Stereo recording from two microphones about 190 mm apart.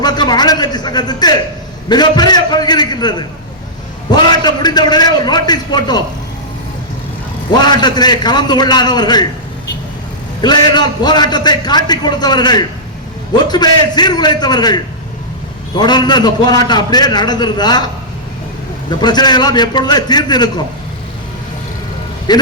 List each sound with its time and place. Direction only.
0.0 s a man's voice: 20° left (ahead or behind)
7.6 s a man's voice: 20° left (ahead or behind)
10.4 s a man's voice: 20° left (ahead or behind)
15.8 s a man's voice: 20° left (ahead or behind)
18.9 s a man's voice: 20° left (ahead or behind)
22.3 s a man's voice: 20° left (ahead or behind)